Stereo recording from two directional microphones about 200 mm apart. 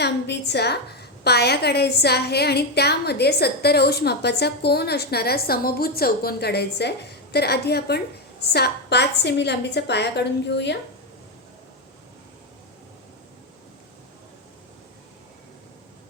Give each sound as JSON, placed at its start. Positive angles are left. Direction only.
{"t": 0.0, "sound": "a woman's voice", "side_deg": 55}